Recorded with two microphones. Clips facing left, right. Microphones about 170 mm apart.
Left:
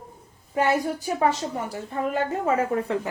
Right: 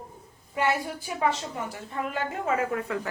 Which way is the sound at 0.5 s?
40° left (ahead or behind).